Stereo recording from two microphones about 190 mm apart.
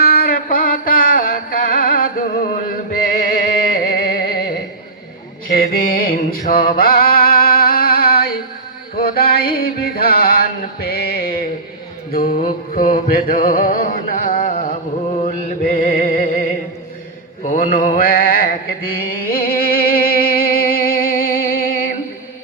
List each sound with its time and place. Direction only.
0.0 s music: 55° left (ahead or behind)
5.5 s a sound: 50° left (ahead or behind)
12.1 s music: 50° left (ahead or behind)
17.4 s mantra: 45° left (ahead or behind)